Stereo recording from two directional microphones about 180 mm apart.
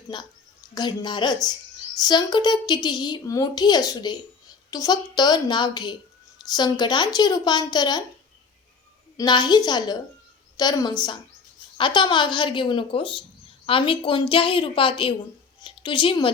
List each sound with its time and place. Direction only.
0.1 s speech: 25° left (ahead or behind)
9.1 s speech: 25° left (ahead or behind)